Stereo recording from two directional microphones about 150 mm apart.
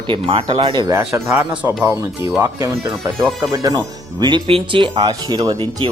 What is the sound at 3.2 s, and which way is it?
Speech, 20° right (ahead or behind).